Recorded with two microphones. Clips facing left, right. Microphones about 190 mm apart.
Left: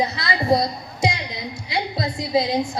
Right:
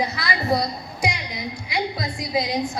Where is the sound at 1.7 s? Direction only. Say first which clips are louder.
Left 2 dB; 25° left (ahead or behind).